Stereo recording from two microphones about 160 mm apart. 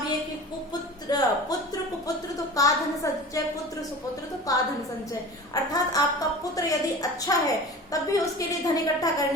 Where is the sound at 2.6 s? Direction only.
20° left (ahead or behind).